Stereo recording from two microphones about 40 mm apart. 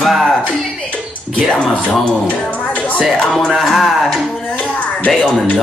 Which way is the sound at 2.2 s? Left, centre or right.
Left.